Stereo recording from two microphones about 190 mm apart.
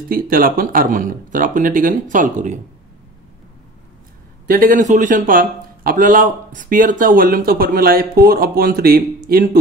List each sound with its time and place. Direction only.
0.1 s a man's voice: 50° right (ahead or behind)
4.5 s a man's voice: 45° right (ahead or behind)